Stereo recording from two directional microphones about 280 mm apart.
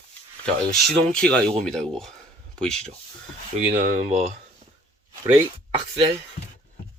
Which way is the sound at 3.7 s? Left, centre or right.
Right.